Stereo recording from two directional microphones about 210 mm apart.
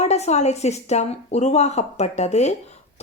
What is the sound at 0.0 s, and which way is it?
A woman's voice, 30° left (ahead or behind).